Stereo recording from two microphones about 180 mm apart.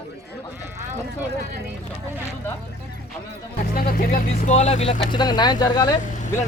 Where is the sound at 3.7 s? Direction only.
50° left (ahead or behind).